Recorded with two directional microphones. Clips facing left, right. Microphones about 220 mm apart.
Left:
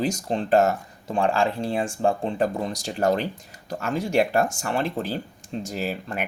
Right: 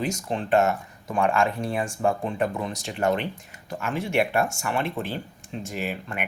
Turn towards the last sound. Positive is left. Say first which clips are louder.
# left 2 dB
turn(degrees=35)  # may be behind; listen again after turning